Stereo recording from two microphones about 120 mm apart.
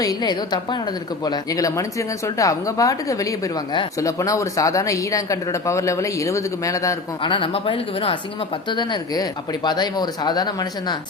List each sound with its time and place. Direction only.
0.0 s speech: 35° left (ahead or behind)
7.2 s speech: 45° left (ahead or behind)